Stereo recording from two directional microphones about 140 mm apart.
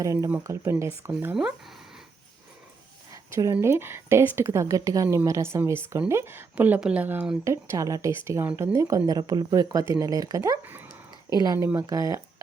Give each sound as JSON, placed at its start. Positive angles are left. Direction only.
{"t": 0.0, "sound": "a woman's voice", "side_deg": -25}
{"t": 3.1, "sound": "a woman's voice", "side_deg": -25}